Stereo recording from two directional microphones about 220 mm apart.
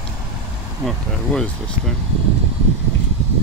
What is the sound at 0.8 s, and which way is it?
Speech, centre (ahead or behind).